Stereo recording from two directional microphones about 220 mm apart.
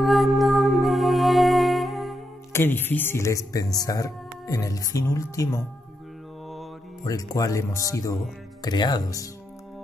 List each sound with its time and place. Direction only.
0.0 s music: centre (ahead or behind)
2.5 s speech: 10° left (ahead or behind)
7.1 s speech: 15° left (ahead or behind)